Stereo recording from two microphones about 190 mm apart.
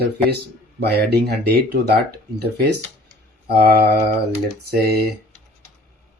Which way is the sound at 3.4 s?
55° right (ahead or behind).